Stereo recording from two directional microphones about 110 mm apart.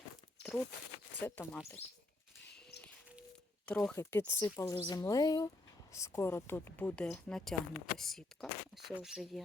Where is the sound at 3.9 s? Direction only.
20° left (ahead or behind).